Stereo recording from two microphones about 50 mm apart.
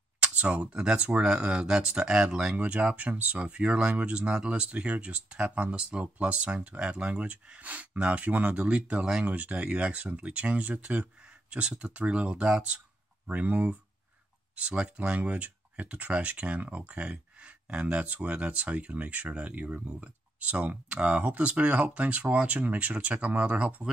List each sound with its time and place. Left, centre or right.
0.2 s a sound: right
0.7 s speech: centre
2.5 s speech: right